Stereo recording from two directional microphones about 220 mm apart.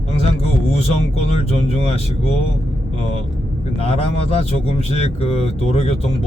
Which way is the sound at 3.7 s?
25° left (ahead or behind).